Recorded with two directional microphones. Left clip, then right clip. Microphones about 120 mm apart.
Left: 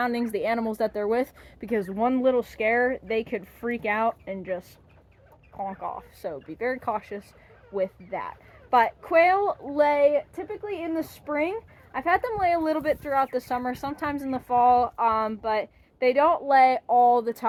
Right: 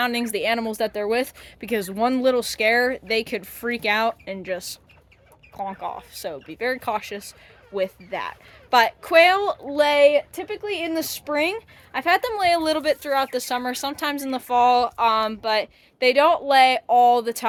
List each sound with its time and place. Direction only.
0.0 s speech: 15° right (ahead or behind)
1.9 s speech: 40° right (ahead or behind)
5.8 s speech: 40° right (ahead or behind)
6.1 s a woman's voice: 15° right (ahead or behind)
10.1 s speech: 45° right (ahead or behind)
10.5 s a woman's voice: 25° right (ahead or behind)
16.9 s speech: 10° right (ahead or behind)